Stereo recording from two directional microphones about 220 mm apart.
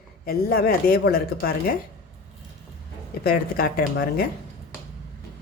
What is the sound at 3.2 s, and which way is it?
Speech, 40° left (ahead or behind).